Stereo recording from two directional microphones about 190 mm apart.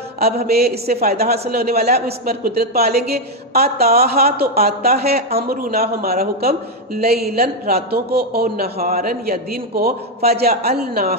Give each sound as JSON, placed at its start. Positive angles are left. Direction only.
{"t": 0.5, "sound": "a man's voice", "side_deg": -55}